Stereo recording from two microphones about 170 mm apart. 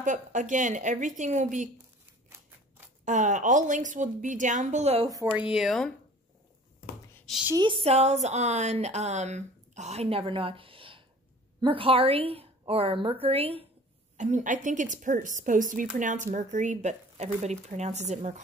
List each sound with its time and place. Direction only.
0.0 s speech: 50° right (ahead or behind)
2.2 s scissors: 15° right (ahead or behind)
3.1 s speech: 45° right (ahead or behind)
5.0 s speech: 15° right (ahead or behind)
5.5 s speech: centre (ahead or behind)
7.5 s speech: 30° right (ahead or behind)
14.1 s speech: 45° right (ahead or behind)